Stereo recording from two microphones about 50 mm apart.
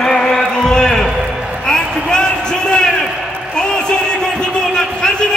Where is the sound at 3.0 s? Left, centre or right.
Centre.